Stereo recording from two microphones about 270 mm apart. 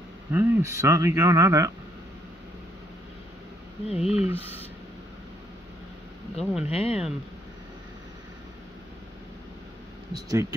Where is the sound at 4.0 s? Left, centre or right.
Centre.